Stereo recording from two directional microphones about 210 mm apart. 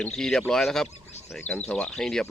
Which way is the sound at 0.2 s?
5° left (ahead or behind).